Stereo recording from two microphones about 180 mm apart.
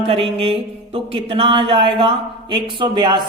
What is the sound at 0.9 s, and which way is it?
Speech, 30° right (ahead or behind).